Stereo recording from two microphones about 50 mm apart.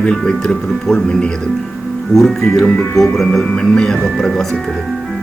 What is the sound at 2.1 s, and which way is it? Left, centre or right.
Speech, centre.